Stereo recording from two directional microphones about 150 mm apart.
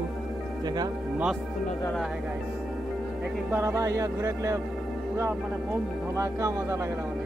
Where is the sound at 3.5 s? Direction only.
15° right (ahead or behind).